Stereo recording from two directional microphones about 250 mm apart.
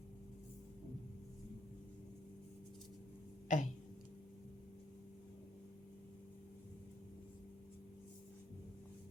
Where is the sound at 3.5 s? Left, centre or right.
Left.